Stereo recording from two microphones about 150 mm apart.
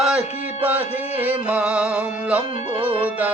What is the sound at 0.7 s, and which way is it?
Music, 10° right (ahead or behind).